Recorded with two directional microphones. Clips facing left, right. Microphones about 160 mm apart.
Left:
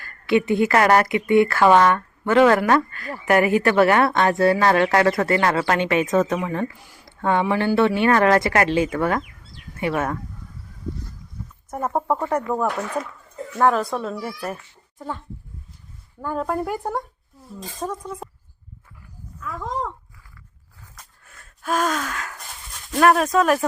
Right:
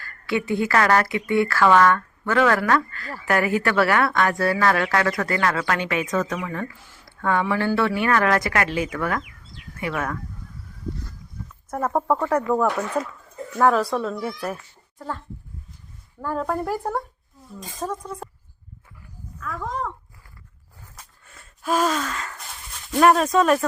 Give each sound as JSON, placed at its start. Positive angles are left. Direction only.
{"t": 0.0, "sound": "speech", "side_deg": 20}
{"t": 11.9, "sound": "speech", "side_deg": 10}
{"t": 16.2, "sound": "speech", "side_deg": 0}
{"t": 19.4, "sound": "speech", "side_deg": 15}
{"t": 20.9, "sound": "gasp", "side_deg": 0}
{"t": 22.9, "sound": "speech", "side_deg": 0}